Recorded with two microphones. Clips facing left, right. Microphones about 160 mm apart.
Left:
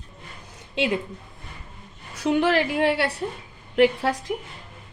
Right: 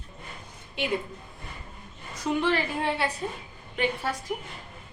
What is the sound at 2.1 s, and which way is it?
A woman's voice, 85° left.